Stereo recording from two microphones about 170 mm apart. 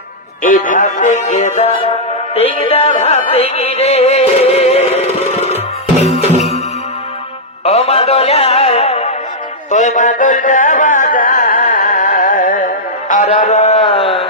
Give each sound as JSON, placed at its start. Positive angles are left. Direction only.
{"t": 0.4, "sound": "music", "side_deg": 50}
{"t": 7.6, "sound": "music", "side_deg": 40}
{"t": 13.1, "sound": "a sound", "side_deg": 45}